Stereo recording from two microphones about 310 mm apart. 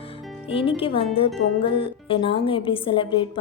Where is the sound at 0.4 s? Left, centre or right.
Centre.